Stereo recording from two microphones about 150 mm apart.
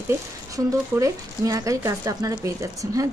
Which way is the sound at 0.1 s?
20° right (ahead or behind).